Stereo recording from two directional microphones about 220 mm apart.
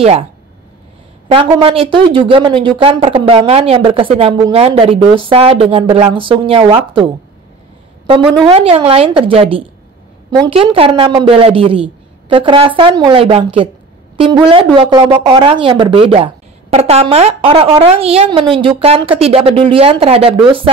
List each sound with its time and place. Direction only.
0.0 s speech: 25° right (ahead or behind)
1.3 s speech: 25° right (ahead or behind)
8.4 s speech: 25° right (ahead or behind)